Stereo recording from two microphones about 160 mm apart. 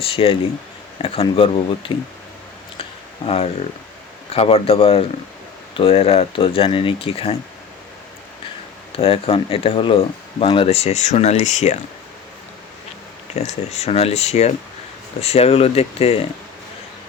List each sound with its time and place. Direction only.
0.0 s speech: 35° left (ahead or behind)
3.2 s speech: 35° left (ahead or behind)
8.9 s speech: 35° left (ahead or behind)
13.3 s speech: 45° left (ahead or behind)